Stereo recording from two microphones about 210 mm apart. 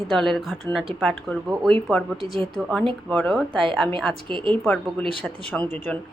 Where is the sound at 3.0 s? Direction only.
Centre (ahead or behind).